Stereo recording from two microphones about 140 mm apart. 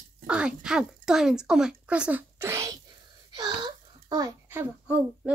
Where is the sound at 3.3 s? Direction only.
30° right (ahead or behind).